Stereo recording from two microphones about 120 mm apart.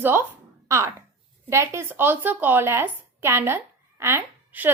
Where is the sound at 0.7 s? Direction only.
25° right (ahead or behind).